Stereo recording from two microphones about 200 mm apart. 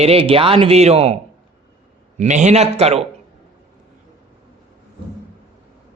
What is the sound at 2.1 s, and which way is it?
Speech, 35° right (ahead or behind).